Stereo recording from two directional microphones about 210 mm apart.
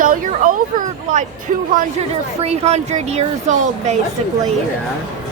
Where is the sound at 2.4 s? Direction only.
30° right (ahead or behind).